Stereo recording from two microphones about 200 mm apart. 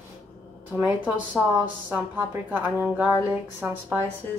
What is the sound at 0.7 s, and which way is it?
Speech, 10° right (ahead or behind).